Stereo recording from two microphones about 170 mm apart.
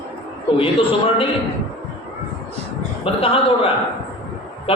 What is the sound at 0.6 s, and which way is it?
Speech, 35° left (ahead or behind).